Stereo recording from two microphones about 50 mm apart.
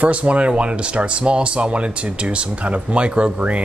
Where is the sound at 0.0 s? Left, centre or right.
Right.